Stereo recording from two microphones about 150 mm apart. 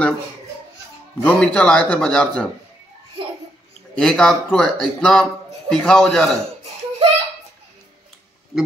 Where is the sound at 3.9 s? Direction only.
5° left (ahead or behind).